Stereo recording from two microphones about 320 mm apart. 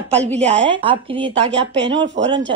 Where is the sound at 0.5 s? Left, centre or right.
Right.